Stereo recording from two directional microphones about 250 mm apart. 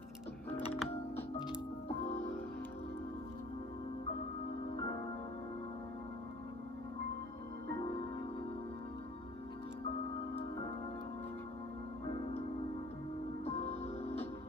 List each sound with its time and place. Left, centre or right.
0.5 s music: left
13.5 s music: left